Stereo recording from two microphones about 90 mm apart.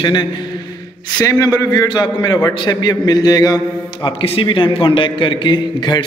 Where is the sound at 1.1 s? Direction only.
40° left (ahead or behind).